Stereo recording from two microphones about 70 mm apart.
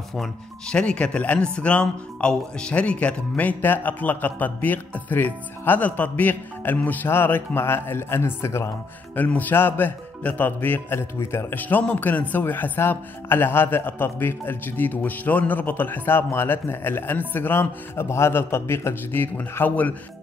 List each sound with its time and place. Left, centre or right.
0.1 s speech: centre; by 8.6 s left
9.1 s speech: left
11.8 s speech: left